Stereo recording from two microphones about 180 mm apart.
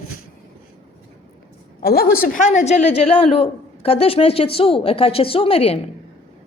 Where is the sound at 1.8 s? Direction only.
55° left (ahead or behind).